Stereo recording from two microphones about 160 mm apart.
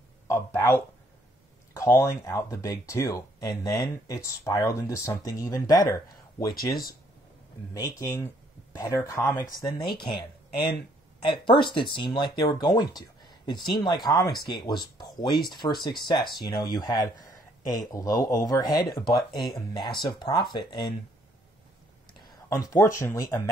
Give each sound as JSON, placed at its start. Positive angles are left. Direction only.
{"t": 0.3, "sound": "speech", "side_deg": 15}
{"t": 7.7, "sound": "speech", "side_deg": 20}
{"t": 22.2, "sound": "speech", "side_deg": 20}